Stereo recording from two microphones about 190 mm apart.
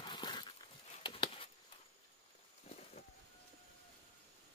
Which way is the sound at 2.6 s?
35° left (ahead or behind).